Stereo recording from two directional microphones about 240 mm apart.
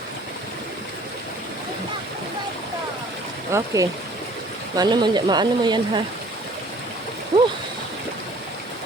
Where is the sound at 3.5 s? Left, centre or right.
Centre.